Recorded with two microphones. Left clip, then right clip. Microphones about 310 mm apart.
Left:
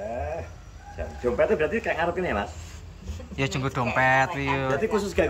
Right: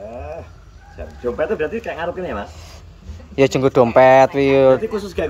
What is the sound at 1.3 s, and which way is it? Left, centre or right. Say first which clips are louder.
Speech: right 2 dB; centre.